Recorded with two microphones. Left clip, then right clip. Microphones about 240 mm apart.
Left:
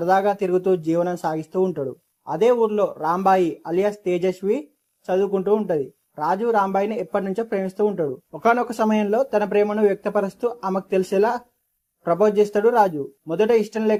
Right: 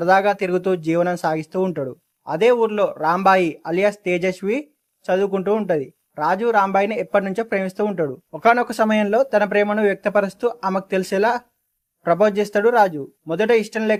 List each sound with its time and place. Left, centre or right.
0.0 s a man's voice: right